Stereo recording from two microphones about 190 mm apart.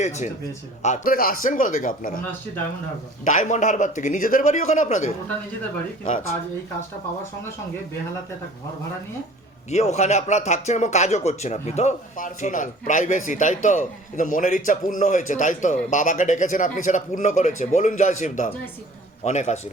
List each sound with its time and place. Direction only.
0.0 s a man's voice: 35° left (ahead or behind)
3.2 s speech: 40° left (ahead or behind)
9.6 s speech: 35° left (ahead or behind)